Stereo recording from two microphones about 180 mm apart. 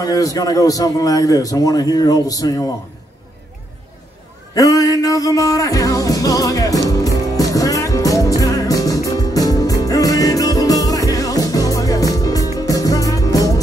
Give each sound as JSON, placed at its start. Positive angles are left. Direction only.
{"t": 0.0, "sound": "a man's voice", "side_deg": 20}
{"t": 4.6, "sound": "a man's voice", "side_deg": 20}
{"t": 6.9, "sound": "music", "side_deg": 20}